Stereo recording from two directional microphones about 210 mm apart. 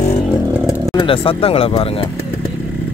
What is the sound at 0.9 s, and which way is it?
Speech, 25° left (ahead or behind).